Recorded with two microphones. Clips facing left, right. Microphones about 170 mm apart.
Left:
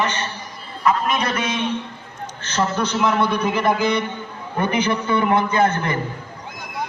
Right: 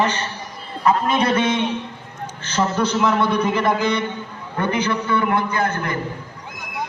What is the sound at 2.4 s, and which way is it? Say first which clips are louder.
A man's voice: right 1 dB; 10° right (ahead or behind).